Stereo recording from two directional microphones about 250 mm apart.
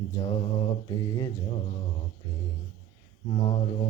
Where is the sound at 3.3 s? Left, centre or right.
Left.